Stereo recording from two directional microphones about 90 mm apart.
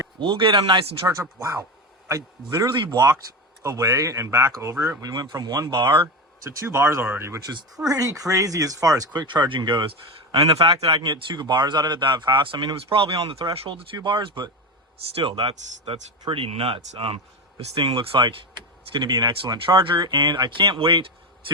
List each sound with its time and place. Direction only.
0.2 s speech: 65° right (ahead or behind)
1.0 s speech: 35° right (ahead or behind)
2.6 s speech: 50° right (ahead or behind)
3.6 s speech: 40° right (ahead or behind)
7.9 s speech: 40° right (ahead or behind)
9.2 s speech: 60° right (ahead or behind)
10.3 s speech: 90° right
13.9 s speech: 65° right (ahead or behind)
15.1 s speech: 90° right
18.5 s speech: 50° right (ahead or behind); by 21.5 s 75° right (ahead or behind)